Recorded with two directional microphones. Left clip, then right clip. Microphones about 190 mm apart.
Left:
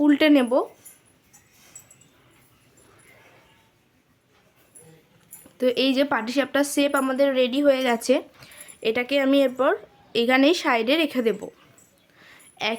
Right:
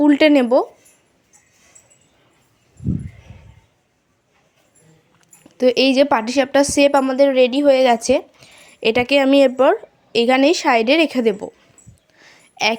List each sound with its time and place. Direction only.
0.0 s speech: 25° right (ahead or behind)
5.5 s a woman's voice: 25° right (ahead or behind)
12.1 s a sound: 20° right (ahead or behind)